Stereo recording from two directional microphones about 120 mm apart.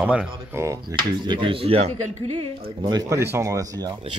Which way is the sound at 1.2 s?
40° right (ahead or behind).